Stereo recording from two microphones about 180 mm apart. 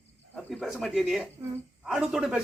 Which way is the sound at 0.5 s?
Centre (ahead or behind).